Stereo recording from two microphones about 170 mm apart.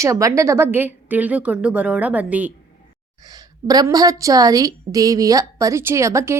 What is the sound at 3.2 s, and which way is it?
A woman's voice, 25° right (ahead or behind).